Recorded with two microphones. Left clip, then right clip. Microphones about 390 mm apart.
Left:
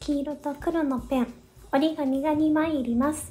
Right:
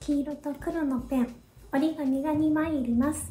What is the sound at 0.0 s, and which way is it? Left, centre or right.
A child's voice, centre.